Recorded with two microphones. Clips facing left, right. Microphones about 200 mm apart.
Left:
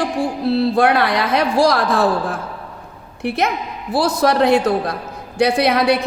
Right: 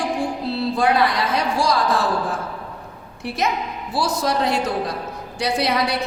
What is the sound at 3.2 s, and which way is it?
A woman's voice, 55° left (ahead or behind).